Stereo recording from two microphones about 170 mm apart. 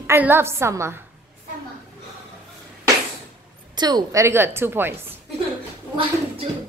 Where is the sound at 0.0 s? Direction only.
15° right (ahead or behind).